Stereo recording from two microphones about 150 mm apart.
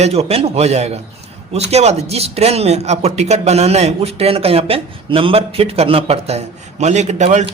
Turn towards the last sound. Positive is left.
turn(degrees=-50)  # may be behind; listen again after turning